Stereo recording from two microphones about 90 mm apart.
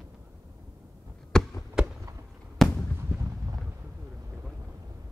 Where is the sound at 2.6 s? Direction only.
5° left (ahead or behind).